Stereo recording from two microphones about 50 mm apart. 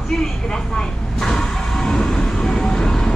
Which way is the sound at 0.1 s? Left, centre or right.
Centre.